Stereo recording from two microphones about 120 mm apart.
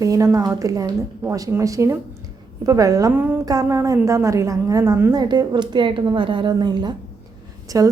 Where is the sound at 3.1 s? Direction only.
15° right (ahead or behind).